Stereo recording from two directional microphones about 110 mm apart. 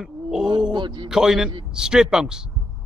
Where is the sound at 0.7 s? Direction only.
45° right (ahead or behind).